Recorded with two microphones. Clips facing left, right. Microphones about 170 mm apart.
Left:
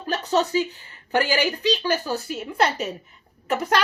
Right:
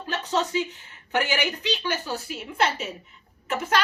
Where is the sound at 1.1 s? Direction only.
35° left (ahead or behind).